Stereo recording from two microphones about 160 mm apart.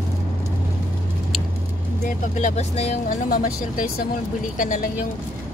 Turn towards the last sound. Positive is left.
turn(degrees=55)  # may be behind; listen again after turning